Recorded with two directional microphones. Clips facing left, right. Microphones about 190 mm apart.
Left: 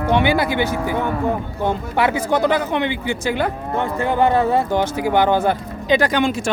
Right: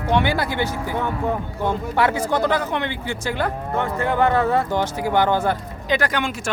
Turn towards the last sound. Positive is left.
turn(degrees=25)  # may be behind; listen again after turning